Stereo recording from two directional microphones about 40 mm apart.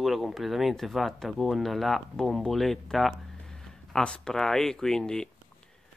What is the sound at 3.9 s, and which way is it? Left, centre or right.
Speech, centre.